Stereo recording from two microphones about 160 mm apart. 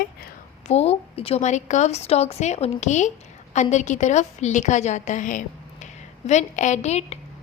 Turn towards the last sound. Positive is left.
turn(degrees=45)  # may be behind; listen again after turning